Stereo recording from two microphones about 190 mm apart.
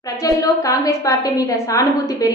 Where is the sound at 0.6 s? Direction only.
15° left (ahead or behind).